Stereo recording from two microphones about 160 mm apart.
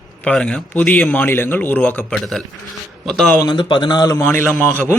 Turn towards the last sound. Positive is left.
turn(degrees=10)  # may be behind; listen again after turning